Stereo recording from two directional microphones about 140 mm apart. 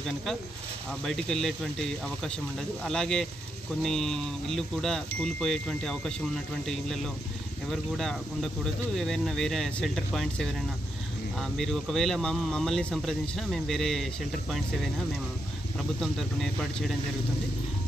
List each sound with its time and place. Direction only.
1.0 s speech: 5° left (ahead or behind)
16.0 s speech: centre (ahead or behind)